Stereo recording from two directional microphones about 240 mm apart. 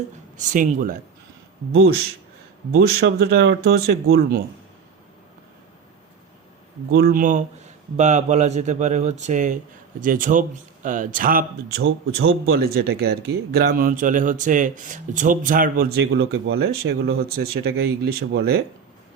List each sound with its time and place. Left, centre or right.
0.3 s speech: right
2.7 s speech: right
6.9 s speech: right
11.8 s speech: right